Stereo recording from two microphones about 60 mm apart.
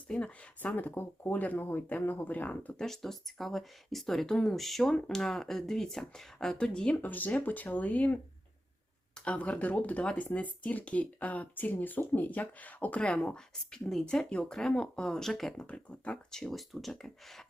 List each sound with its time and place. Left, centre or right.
0.1 s speech: centre
2.7 s speech: centre
6.9 s speech: left; by 15.6 s centre
15.6 s speech: left
16.3 s speech: centre